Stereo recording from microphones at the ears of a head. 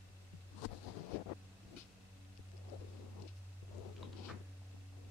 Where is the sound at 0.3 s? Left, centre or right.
Left.